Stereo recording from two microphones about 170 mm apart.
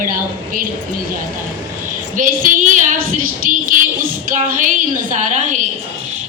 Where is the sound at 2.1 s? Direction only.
50° right (ahead or behind).